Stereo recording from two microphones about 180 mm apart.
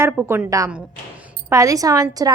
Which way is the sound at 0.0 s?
15° right (ahead or behind).